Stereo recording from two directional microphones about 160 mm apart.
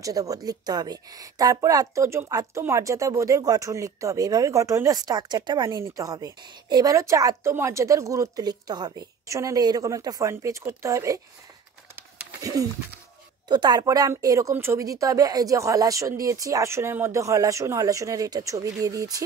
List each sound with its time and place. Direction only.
0.0 s speech: 20° right (ahead or behind)
11.9 s a sound: 20° right (ahead or behind)
13.5 s speech: 25° right (ahead or behind)